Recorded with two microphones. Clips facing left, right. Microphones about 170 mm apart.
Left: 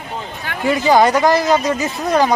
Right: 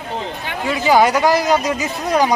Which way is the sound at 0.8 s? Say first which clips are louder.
Even; 10° right (ahead or behind).